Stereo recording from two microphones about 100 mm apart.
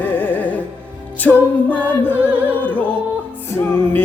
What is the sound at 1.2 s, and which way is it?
A capella, 15° left (ahead or behind).